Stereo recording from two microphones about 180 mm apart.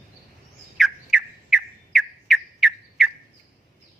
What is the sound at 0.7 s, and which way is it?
Squawk, 5° right (ahead or behind).